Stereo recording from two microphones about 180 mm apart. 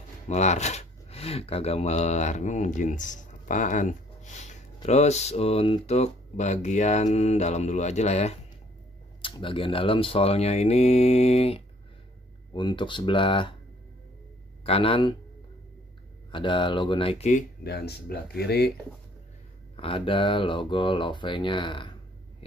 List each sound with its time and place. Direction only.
0.3 s speech: 40° left (ahead or behind)
14.6 s speech: 30° left (ahead or behind)
16.3 s speech: 25° left (ahead or behind)
17.6 s speech: 65° left (ahead or behind)
19.8 s speech: 30° left (ahead or behind)